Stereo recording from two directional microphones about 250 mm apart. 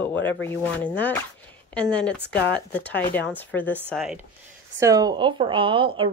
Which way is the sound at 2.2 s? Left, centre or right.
Left.